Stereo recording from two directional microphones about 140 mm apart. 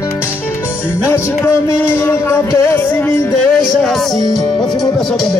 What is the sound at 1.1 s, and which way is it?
Music, 15° left (ahead or behind).